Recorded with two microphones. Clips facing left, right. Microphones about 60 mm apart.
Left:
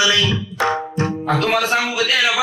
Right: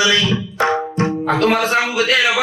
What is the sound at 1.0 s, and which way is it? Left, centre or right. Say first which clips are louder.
Speech: right 5 dB; right.